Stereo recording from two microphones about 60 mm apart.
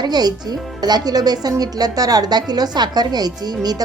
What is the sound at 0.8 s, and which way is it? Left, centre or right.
A woman's voice, right.